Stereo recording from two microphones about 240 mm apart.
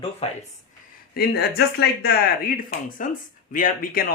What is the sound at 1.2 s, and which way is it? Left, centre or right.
Speech, left.